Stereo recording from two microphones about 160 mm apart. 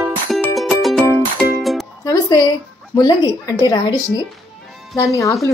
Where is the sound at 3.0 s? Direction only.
25° left (ahead or behind).